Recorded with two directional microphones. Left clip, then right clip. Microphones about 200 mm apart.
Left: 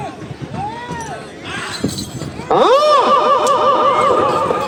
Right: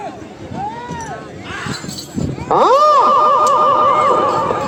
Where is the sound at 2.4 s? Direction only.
55° left (ahead or behind).